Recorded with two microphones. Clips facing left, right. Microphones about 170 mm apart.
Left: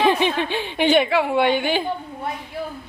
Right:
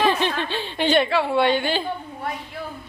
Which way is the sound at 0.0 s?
15° left (ahead or behind).